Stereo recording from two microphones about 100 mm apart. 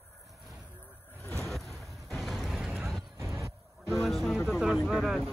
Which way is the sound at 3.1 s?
30° right (ahead or behind).